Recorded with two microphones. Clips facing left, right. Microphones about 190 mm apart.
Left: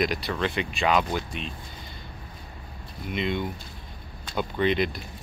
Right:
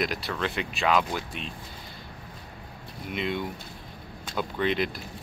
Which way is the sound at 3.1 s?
5° right (ahead or behind).